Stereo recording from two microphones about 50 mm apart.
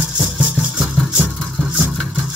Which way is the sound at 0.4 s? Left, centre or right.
Centre.